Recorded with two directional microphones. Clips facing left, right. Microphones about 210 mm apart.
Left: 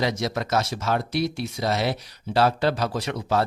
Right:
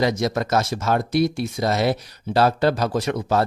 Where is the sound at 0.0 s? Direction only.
45° right (ahead or behind).